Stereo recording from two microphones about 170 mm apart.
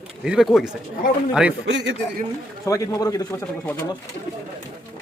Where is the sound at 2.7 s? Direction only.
20° left (ahead or behind).